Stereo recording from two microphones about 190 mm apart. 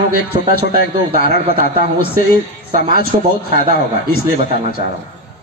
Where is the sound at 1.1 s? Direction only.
55° right (ahead or behind).